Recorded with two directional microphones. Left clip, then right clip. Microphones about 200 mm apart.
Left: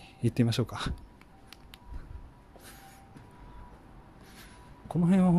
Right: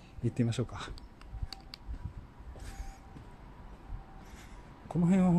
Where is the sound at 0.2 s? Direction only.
30° left (ahead or behind).